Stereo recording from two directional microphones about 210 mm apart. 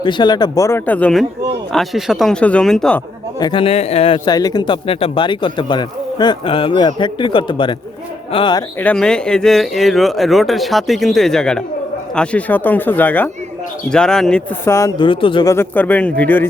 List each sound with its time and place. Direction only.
0.0 s speech: 20° left (ahead or behind); by 3.0 s 5° left (ahead or behind)
3.4 s a man's voice: 25° left (ahead or behind)
8.8 s speech: 5° left (ahead or behind); by 15.5 s 25° left (ahead or behind)
15.5 s speech: 10° left (ahead or behind)